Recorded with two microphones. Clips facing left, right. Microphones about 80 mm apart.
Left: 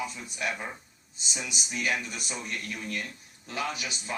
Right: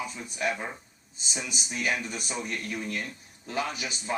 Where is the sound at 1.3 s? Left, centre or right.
Right.